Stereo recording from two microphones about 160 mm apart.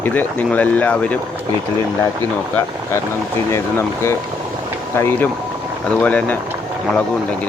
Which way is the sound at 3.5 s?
15° left (ahead or behind).